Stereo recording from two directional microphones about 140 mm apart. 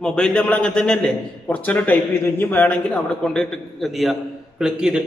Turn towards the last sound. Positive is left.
turn(degrees=-5)  # may be behind; listen again after turning